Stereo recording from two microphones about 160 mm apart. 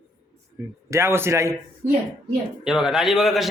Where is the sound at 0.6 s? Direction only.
20° right (ahead or behind).